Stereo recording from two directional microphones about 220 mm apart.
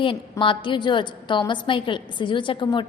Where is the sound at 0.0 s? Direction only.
25° left (ahead or behind).